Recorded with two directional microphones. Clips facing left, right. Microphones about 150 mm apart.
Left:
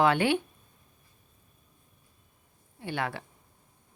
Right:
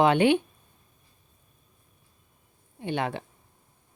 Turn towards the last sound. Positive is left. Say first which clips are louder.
# right 4 dB
turn(degrees=-20)  # may be behind; listen again after turning